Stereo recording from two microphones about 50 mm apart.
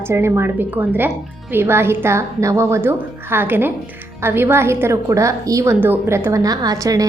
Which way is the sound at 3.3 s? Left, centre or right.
Right.